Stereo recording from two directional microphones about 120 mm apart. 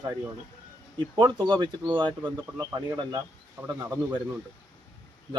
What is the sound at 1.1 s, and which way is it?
A man's voice, 35° right (ahead or behind).